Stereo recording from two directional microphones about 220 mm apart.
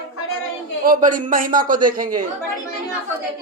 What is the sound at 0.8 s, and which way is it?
Speech, 40° right (ahead or behind).